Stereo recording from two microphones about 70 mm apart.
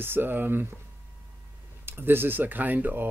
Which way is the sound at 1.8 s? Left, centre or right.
Right.